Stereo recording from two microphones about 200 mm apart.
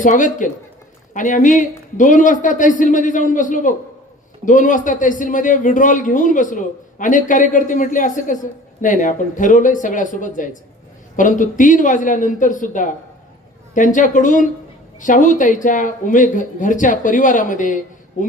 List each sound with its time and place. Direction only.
0.0 s a man's voice: 40° left (ahead or behind)